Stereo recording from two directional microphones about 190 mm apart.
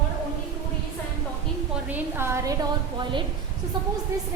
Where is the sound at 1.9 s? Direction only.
15° right (ahead or behind).